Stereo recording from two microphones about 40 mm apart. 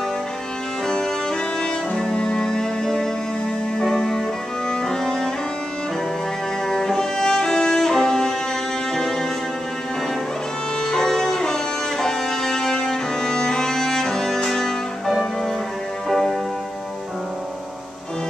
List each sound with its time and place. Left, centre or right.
1.6 s music: centre
4.6 s cello: centre
6.7 s music: centre
10.8 s music: centre